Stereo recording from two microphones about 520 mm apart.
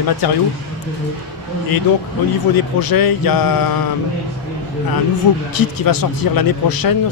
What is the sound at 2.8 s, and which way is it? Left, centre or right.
Speech, left.